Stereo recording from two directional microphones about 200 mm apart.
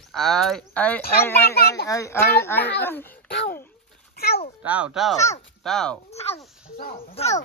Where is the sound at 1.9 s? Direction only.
15° left (ahead or behind).